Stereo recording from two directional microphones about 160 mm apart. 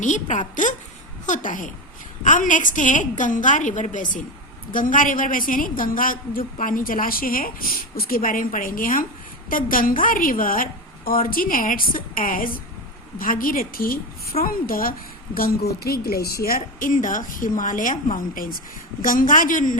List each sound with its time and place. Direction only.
0.0 s a woman's voice: 50° left (ahead or behind)
15.4 s speech: 75° left (ahead or behind)
16.8 s a woman's voice: 55° left (ahead or behind)